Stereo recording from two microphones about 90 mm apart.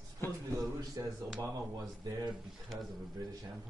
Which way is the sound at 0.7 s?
40° right (ahead or behind).